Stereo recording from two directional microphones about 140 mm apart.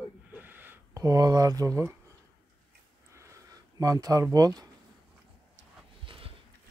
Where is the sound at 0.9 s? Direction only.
25° right (ahead or behind).